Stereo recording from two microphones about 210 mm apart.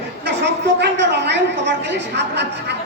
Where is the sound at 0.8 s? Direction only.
55° right (ahead or behind).